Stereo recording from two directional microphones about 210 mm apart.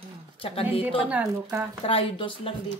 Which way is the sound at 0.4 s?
25° left (ahead or behind).